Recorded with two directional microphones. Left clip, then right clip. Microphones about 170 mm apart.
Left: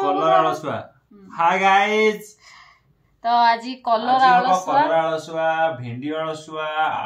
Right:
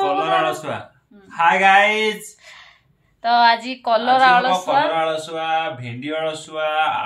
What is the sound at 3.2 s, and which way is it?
A woman's voice, 20° right (ahead or behind).